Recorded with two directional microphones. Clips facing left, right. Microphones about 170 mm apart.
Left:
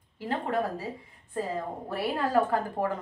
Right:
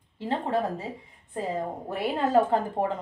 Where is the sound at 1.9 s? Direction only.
20° right (ahead or behind).